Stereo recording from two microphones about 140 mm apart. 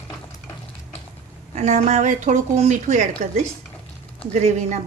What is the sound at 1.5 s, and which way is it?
A woman's voice, 55° right (ahead or behind).